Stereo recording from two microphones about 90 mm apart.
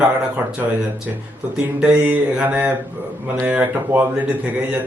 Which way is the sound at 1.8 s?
15° right (ahead or behind).